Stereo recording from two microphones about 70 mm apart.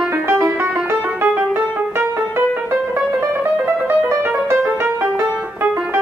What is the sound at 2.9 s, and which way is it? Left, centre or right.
Music, right.